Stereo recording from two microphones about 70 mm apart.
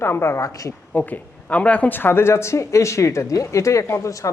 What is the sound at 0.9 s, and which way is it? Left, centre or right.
Speech, left.